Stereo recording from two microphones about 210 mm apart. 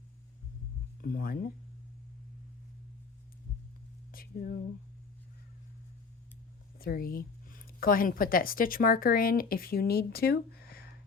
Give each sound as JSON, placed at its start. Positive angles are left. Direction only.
{"t": 1.0, "sound": "speech", "side_deg": 45}
{"t": 4.1, "sound": "a sound", "side_deg": 45}
{"t": 6.7, "sound": "speech", "side_deg": 45}